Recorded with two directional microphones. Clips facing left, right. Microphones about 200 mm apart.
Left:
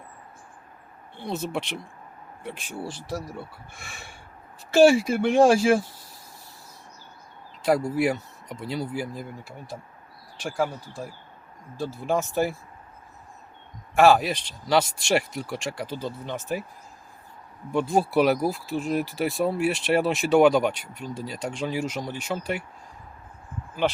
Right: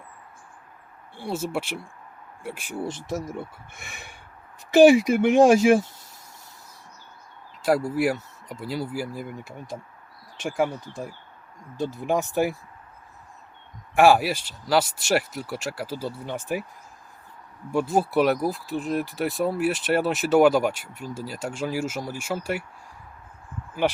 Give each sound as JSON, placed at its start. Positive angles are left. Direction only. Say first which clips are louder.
{"t": 1.1, "sound": "speech", "louder": "right 1 dB", "side_deg": -10}
{"t": 7.9, "sound": "speech", "louder": "even", "side_deg": -5}
{"t": 9.3, "sound": "speech", "louder": "right 2 dB", "side_deg": -20}
{"t": 13.9, "sound": "speech", "louder": "even", "side_deg": -15}
{"t": 17.7, "sound": "speech", "louder": "even", "side_deg": -5}